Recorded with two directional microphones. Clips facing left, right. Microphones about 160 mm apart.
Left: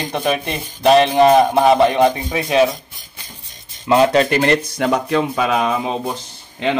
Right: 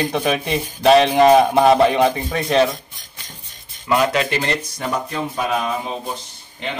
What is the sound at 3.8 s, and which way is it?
Speech, 25° left (ahead or behind).